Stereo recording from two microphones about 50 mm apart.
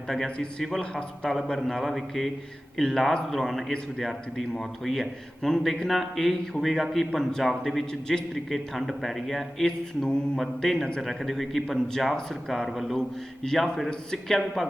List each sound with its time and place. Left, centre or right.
0.8 s a man's voice: centre
1.3 s a man's voice: centre
11.0 s a man's voice: centre
13.0 s a man's voice: centre